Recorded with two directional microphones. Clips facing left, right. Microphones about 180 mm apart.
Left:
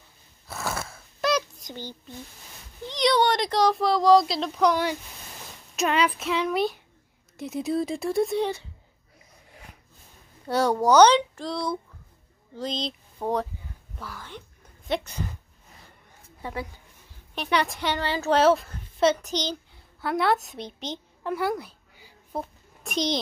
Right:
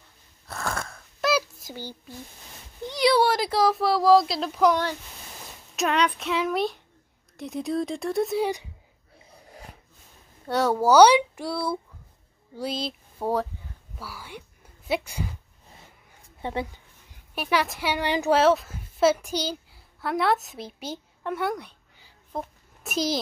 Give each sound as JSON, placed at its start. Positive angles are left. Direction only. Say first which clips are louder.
{"t": 0.5, "sound": "a sound", "louder": "even", "side_deg": 5}
{"t": 2.8, "sound": "speech", "louder": "right 1 dB", "side_deg": -10}
{"t": 5.8, "sound": "speech", "louder": "even", "side_deg": 0}
{"t": 9.3, "sound": "snort", "louder": "right 5 dB", "side_deg": -35}
{"t": 10.4, "sound": "a woman's voice", "louder": "even", "side_deg": 0}
{"t": 16.3, "sound": "a woman's voice", "louder": "right 4 dB", "side_deg": -25}
{"t": 17.4, "sound": "a woman's voice", "louder": "even", "side_deg": -5}
{"t": 18.3, "sound": "a child's voice", "louder": "left 1 dB", "side_deg": 0}
{"t": 22.8, "sound": "speech", "louder": "even", "side_deg": -5}